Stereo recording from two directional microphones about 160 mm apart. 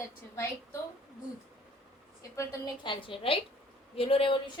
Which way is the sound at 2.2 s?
20° left (ahead or behind).